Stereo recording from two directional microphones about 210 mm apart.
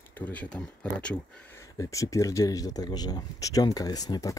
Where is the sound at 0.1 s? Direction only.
5° left (ahead or behind).